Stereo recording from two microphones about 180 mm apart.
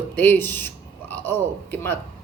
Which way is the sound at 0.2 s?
10° left (ahead or behind).